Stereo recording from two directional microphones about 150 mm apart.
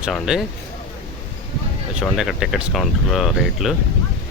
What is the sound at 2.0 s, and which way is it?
Speech, 5° right (ahead or behind).